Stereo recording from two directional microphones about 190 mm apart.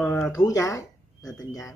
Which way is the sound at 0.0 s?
10° left (ahead or behind).